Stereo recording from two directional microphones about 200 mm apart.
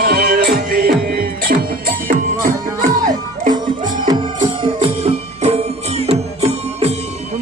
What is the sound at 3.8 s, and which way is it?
Music, 20° right (ahead or behind).